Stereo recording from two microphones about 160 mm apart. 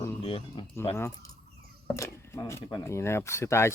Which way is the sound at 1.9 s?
20° left (ahead or behind).